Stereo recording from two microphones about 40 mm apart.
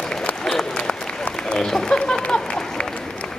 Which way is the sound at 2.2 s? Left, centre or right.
Left.